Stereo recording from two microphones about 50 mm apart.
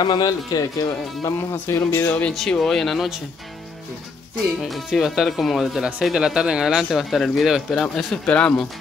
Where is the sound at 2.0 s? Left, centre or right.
Left.